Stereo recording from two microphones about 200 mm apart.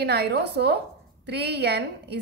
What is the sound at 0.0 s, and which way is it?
A woman's voice, 55° right (ahead or behind).